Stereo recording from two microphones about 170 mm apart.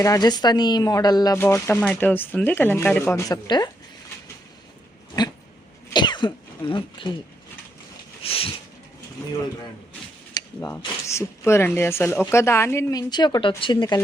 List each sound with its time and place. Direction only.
0.0 s speech: 20° left (ahead or behind)
5.9 s throat clearing: 25° left (ahead or behind)
8.2 s a sound: 35° left (ahead or behind)
10.3 s a woman's voice: 20° left (ahead or behind)